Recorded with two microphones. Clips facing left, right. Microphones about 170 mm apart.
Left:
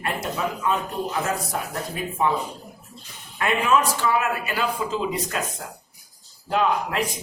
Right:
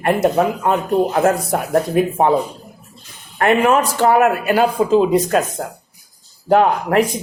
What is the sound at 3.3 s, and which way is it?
Speech, 60° right (ahead or behind).